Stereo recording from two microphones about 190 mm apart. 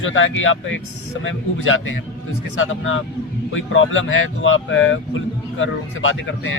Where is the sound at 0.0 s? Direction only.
90° left.